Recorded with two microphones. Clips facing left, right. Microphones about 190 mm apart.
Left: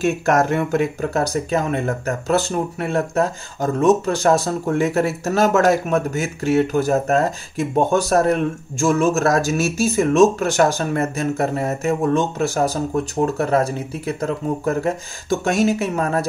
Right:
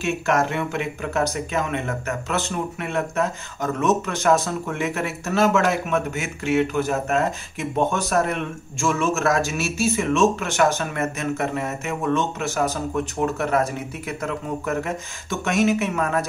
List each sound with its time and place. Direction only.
0.0 s speech: 45° left (ahead or behind)